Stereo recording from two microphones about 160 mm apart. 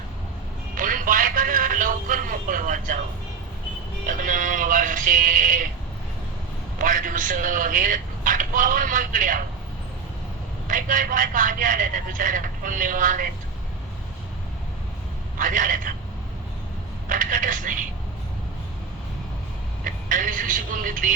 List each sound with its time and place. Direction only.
0.8 s a sound: 60° right (ahead or behind)
4.0 s music: 55° right (ahead or behind)
6.7 s speech: 55° right (ahead or behind)
10.7 s a man's voice: 55° right (ahead or behind)
15.4 s a man's voice: 55° right (ahead or behind)
17.1 s speech: 55° right (ahead or behind)
19.8 s speech: 55° right (ahead or behind)